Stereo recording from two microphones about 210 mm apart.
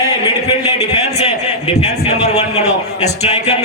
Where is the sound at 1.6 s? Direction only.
30° left (ahead or behind).